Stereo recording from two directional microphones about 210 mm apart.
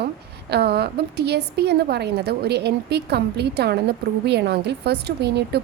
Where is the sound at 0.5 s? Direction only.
50° right (ahead or behind).